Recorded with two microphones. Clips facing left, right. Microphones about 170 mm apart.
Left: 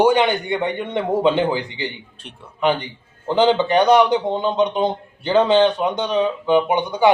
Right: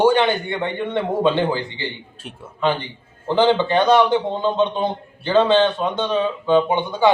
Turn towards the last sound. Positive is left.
turn(degrees=15)  # may be behind; listen again after turning